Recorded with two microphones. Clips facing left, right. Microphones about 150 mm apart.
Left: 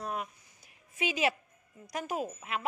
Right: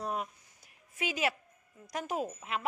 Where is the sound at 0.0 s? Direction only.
5° left (ahead or behind).